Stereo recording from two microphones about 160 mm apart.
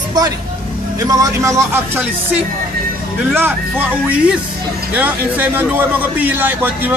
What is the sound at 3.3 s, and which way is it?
A man's voice, 10° right (ahead or behind).